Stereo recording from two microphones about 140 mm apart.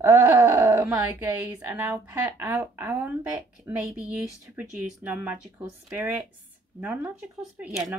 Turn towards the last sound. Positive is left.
turn(degrees=-5)  # may be behind; listen again after turning